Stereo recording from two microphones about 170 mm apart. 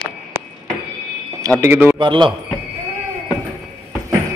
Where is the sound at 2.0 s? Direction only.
30° right (ahead or behind).